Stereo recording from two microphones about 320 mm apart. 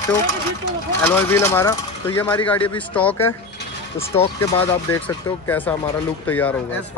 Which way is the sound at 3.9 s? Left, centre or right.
Centre.